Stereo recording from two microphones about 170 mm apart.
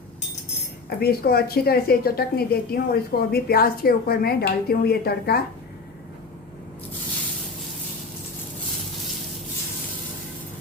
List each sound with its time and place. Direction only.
0.9 s a woman's voice: 65° left (ahead or behind)